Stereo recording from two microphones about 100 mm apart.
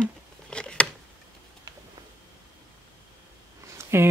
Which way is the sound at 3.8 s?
30° right (ahead or behind).